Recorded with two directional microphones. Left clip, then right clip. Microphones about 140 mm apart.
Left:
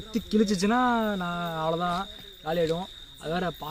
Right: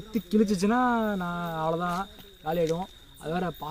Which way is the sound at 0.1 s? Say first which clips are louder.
Even; 5° right (ahead or behind).